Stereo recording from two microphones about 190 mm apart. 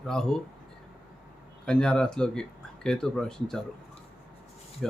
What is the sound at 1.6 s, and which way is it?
Speech, 5° left (ahead or behind).